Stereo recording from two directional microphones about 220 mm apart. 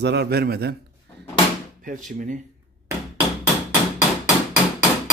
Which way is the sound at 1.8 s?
35° right (ahead or behind).